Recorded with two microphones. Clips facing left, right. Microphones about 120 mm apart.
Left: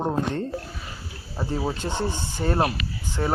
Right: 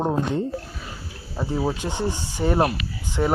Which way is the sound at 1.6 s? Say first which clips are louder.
Right 2 dB; 10° right (ahead or behind).